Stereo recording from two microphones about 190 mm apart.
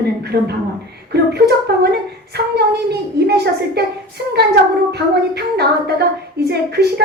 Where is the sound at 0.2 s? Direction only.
60° right (ahead or behind).